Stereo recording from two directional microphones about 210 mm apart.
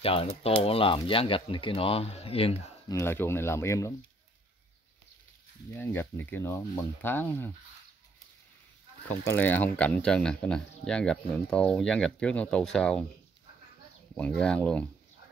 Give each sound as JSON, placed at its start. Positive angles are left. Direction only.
{"t": 0.0, "sound": "speech", "side_deg": 25}
{"t": 2.9, "sound": "speech", "side_deg": 10}
{"t": 5.7, "sound": "speech", "side_deg": 10}
{"t": 9.2, "sound": "speech", "side_deg": 10}
{"t": 14.1, "sound": "speech", "side_deg": 5}